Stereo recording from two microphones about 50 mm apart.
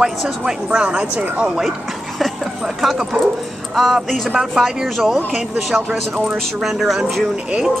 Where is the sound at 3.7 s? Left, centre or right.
Centre.